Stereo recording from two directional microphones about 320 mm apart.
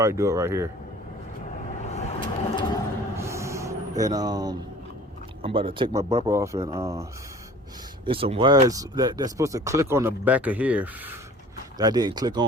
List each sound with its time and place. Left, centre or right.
0.0 s speech: centre
1.9 s vehicle: centre
3.2 s a sound: centre
5.4 s speech: centre